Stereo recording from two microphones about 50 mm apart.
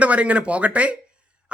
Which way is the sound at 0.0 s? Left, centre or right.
Right.